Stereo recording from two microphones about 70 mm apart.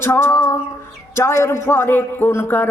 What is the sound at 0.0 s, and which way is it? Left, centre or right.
Music, left.